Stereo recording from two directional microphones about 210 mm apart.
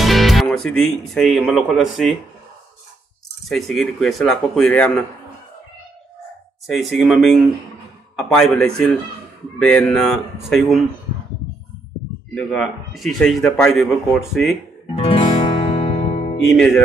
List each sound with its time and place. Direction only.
0.0 s speech: centre (ahead or behind)
3.4 s speech: centre (ahead or behind)
6.7 s speech: centre (ahead or behind)
12.4 s speech: centre (ahead or behind)
15.0 s music: 25° left (ahead or behind)
16.4 s speech: centre (ahead or behind)